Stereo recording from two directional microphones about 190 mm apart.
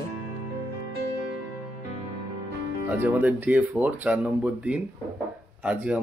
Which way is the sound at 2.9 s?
10° right (ahead or behind).